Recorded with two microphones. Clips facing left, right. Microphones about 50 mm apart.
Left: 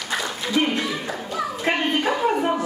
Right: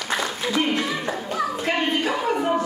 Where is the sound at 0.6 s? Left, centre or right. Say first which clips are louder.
Left 2 dB; left.